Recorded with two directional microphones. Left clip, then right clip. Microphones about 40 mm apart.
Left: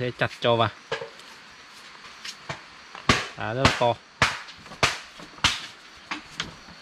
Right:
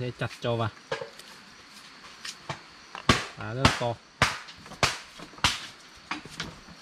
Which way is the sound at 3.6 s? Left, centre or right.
Right.